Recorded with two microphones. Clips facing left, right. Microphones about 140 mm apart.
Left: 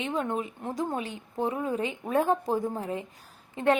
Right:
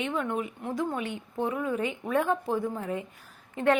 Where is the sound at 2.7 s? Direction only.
30° left (ahead or behind).